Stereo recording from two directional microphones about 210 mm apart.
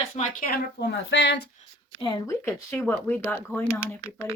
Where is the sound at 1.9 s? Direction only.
20° left (ahead or behind).